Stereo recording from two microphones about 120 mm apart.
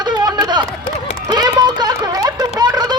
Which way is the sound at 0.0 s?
35° right (ahead or behind).